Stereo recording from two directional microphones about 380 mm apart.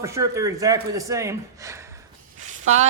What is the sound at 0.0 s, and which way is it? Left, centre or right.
Speech, centre.